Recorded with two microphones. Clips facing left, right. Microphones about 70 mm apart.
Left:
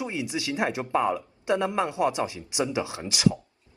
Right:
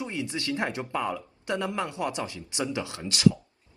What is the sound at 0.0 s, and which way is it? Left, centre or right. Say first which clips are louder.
Speech: left 2 dB; centre.